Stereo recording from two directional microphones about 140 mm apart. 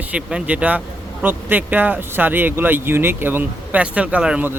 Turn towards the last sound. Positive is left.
turn(degrees=-10)  # may be behind; listen again after turning